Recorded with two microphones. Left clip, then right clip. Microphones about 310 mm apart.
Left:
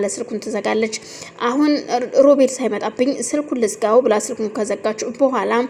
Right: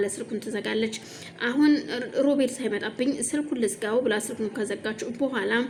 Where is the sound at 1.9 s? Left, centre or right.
Centre.